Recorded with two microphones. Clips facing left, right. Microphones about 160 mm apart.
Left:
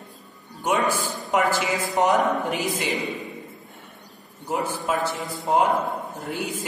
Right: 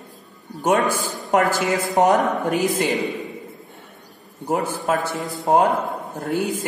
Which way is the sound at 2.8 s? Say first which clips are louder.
Right 5 dB; centre (ahead or behind).